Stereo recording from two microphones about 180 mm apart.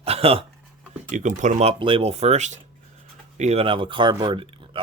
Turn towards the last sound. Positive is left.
turn(degrees=-30)  # may be behind; listen again after turning